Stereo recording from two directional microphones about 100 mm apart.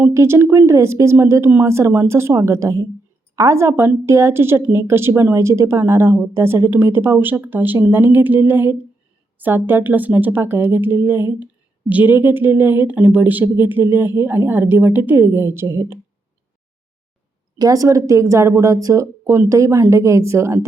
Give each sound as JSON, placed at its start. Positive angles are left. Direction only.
{"t": 0.0, "sound": "a woman's voice", "side_deg": -25}
{"t": 17.6, "sound": "speech", "side_deg": -35}